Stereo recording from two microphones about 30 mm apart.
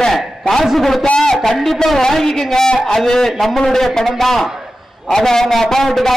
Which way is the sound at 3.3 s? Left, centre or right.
Centre.